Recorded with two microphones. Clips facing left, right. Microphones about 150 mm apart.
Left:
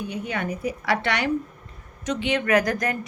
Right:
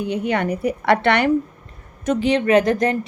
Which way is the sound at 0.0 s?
70° right (ahead or behind).